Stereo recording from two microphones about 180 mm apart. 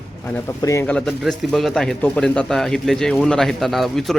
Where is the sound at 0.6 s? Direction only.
15° left (ahead or behind).